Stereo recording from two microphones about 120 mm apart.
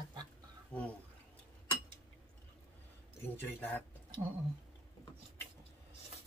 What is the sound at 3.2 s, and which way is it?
Speech, 15° left (ahead or behind).